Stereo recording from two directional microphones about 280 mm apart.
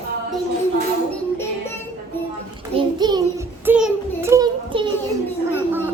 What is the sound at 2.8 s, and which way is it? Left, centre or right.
Child singing, centre.